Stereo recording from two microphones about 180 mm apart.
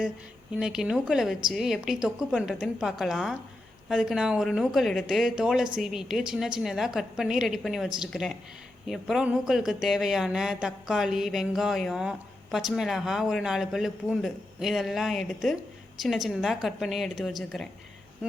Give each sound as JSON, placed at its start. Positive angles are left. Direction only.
{"t": 0.6, "sound": "speech", "side_deg": -5}